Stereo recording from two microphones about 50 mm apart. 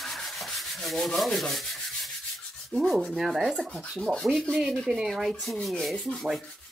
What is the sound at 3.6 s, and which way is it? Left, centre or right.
Rub, left.